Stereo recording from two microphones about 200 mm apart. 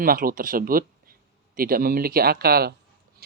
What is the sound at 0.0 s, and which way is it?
Speech, 45° right (ahead or behind).